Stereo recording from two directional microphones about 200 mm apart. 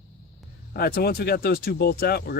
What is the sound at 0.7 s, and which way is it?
Speech, 50° left (ahead or behind).